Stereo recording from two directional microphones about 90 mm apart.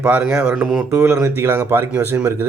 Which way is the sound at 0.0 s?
15° right (ahead or behind).